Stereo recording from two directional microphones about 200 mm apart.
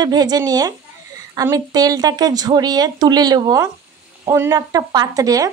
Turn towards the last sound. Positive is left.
turn(degrees=-15)  # may be behind; listen again after turning